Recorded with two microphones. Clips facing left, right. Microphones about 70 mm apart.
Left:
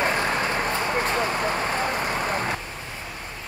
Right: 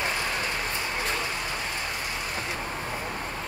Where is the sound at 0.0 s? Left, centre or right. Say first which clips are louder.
Left 6 dB; left.